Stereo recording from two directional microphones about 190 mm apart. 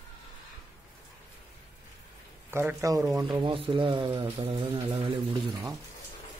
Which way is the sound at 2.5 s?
15° right (ahead or behind).